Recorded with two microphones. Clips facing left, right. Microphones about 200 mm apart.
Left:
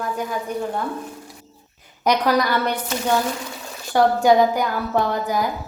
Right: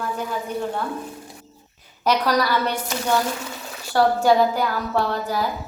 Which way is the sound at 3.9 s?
15° left (ahead or behind).